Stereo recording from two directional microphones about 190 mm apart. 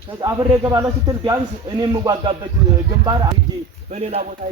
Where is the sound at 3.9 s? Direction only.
35° right (ahead or behind).